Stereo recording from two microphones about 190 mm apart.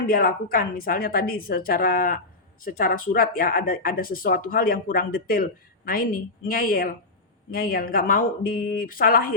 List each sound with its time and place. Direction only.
0.1 s a woman's voice: 50° left (ahead or behind)